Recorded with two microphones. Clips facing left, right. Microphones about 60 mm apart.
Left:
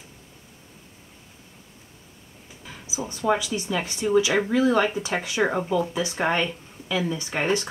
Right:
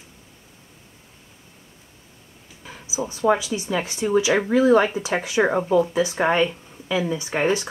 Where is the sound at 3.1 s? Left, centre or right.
Centre.